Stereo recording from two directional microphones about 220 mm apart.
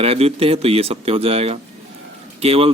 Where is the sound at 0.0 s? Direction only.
25° right (ahead or behind).